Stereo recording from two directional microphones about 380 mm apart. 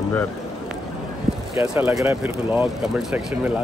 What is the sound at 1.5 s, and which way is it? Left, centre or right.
Speech, centre.